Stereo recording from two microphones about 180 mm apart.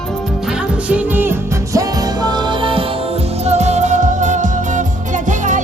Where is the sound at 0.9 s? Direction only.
10° right (ahead or behind); by 2.8 s 25° right (ahead or behind).